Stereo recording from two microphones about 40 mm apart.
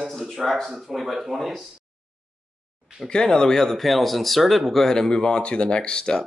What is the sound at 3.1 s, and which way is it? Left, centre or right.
Speech, left.